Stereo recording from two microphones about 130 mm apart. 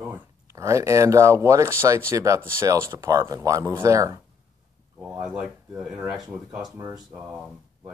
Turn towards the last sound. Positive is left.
turn(degrees=-5)  # may be behind; listen again after turning